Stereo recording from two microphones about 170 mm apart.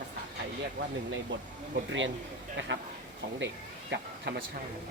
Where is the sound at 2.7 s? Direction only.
90° right.